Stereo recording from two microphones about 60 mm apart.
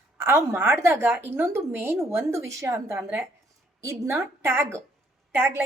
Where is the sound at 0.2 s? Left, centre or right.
Right.